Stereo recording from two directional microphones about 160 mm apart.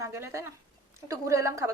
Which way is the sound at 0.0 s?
20° right (ahead or behind).